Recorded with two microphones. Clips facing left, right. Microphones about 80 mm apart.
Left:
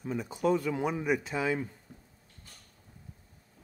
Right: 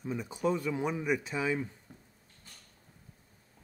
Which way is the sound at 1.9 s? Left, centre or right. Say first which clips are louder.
Left 1 dB; right.